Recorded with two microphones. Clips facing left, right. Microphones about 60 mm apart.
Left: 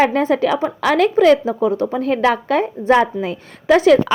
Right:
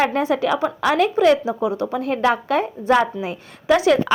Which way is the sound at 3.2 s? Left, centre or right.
Left.